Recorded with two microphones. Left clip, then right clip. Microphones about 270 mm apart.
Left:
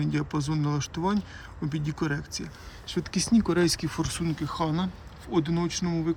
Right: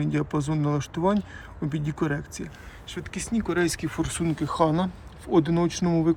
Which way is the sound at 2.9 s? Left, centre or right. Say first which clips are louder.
Left 5 dB; centre.